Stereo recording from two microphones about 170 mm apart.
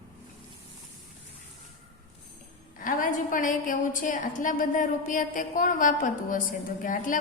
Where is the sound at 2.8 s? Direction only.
50° left (ahead or behind).